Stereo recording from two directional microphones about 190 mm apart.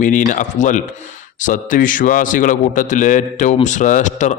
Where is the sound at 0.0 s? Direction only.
40° left (ahead or behind).